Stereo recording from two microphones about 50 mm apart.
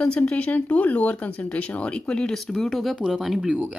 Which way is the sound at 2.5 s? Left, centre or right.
Centre.